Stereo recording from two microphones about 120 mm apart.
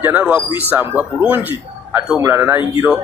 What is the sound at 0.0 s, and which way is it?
A man's voice, 15° right (ahead or behind).